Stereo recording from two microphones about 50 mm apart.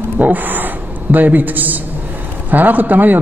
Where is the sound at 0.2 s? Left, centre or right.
Right.